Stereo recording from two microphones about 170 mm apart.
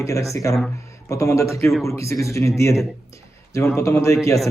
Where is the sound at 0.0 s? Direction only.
20° left (ahead or behind).